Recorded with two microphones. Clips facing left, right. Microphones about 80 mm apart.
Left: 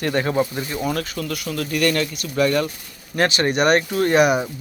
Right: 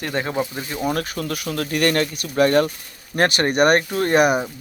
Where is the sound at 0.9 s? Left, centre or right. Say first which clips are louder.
Right 1 dB; right.